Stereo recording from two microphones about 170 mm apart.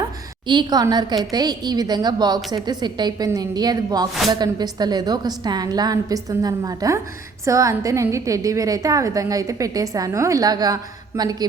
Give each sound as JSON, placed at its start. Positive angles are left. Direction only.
{"t": 0.4, "sound": "a woman's voice", "side_deg": -25}